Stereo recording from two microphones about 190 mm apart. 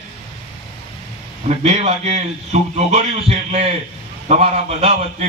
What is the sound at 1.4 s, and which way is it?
A man's voice, 35° right (ahead or behind).